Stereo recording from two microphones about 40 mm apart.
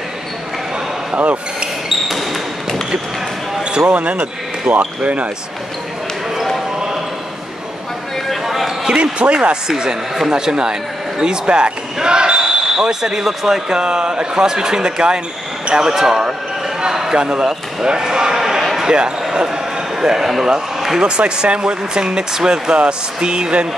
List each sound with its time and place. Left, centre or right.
1.1 s a sound: right
1.9 s basketball bounce: centre
3.7 s speech: right
8.3 s basketball bounce: centre
8.8 s speech: right
16.8 s a sound: centre
17.2 s speech: right
18.6 s basketball bounce: centre
18.9 s speech: right
21.0 s speech: right